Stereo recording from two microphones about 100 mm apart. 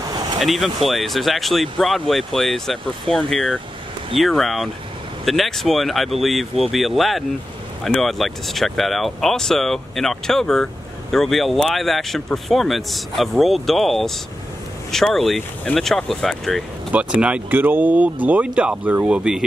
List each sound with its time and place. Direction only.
0.4 s speech: centre (ahead or behind)
16.9 s speech: 10° right (ahead or behind)